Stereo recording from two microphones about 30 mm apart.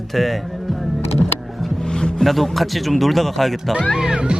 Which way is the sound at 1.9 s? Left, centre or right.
Left.